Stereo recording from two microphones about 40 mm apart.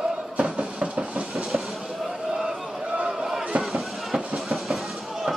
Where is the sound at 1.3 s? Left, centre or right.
Centre.